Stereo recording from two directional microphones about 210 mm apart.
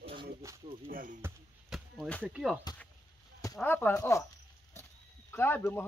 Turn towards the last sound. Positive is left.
turn(degrees=10)  # may be behind; listen again after turning